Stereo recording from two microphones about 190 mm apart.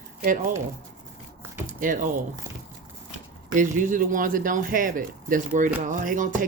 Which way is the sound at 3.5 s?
45° right (ahead or behind).